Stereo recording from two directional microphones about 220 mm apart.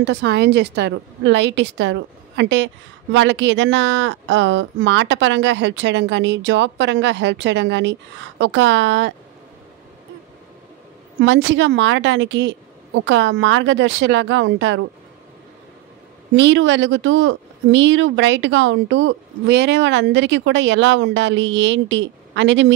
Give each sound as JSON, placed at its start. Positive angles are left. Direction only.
{"t": 0.0, "sound": "a woman's voice", "side_deg": -50}
{"t": 11.1, "sound": "a woman's voice", "side_deg": -55}
{"t": 16.3, "sound": "a woman's voice", "side_deg": -55}